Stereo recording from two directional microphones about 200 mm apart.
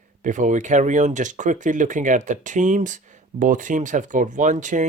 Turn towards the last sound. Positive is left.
turn(degrees=-40)  # may be behind; listen again after turning